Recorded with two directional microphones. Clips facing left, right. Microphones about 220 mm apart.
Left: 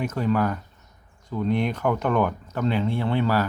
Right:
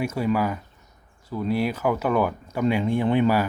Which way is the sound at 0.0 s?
10° right (ahead or behind).